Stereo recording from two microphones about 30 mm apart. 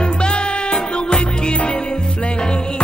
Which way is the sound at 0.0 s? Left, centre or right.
Left.